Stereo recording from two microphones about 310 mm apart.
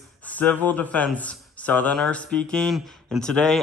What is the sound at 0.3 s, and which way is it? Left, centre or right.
Speech, centre.